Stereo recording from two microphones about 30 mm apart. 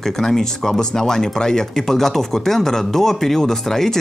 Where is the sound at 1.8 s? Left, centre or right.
Centre.